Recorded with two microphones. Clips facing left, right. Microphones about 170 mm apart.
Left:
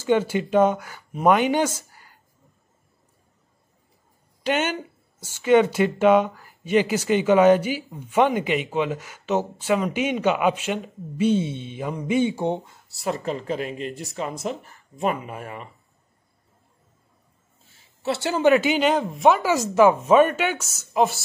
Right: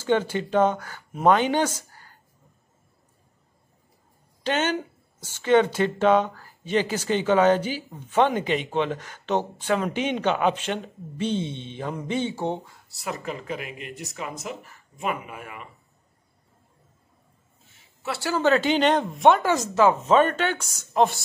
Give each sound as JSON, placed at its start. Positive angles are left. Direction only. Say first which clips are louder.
{"t": 0.0, "sound": "speech", "louder": "left 2 dB", "side_deg": 10}
{"t": 4.4, "sound": "speech", "louder": "left 1 dB", "side_deg": 10}
{"t": 18.0, "sound": "speech", "louder": "left 4 dB", "side_deg": 25}